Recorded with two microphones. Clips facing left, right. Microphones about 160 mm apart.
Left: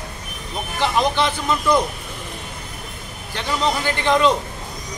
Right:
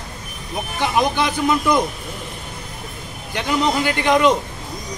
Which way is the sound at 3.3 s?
15° right (ahead or behind).